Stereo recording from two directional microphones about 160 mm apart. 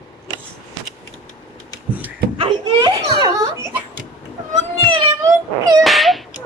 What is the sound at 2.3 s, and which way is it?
A child's voice, 35° right (ahead or behind).